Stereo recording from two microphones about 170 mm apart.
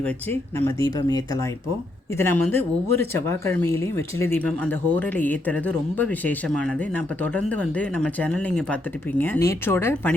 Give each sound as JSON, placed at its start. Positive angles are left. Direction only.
{"t": 0.0, "sound": "speech", "side_deg": 10}